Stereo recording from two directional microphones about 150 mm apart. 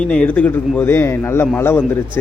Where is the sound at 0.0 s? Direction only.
5° left (ahead or behind).